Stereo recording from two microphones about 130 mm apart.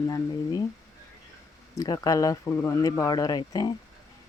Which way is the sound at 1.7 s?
30° left (ahead or behind).